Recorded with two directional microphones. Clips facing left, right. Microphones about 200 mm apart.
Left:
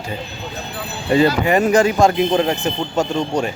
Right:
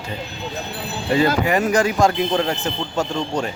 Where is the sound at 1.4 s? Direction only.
25° left (ahead or behind).